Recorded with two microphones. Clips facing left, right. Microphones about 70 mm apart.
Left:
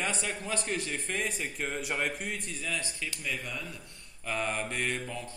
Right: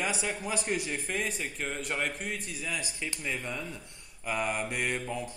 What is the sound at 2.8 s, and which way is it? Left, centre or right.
Speech, centre.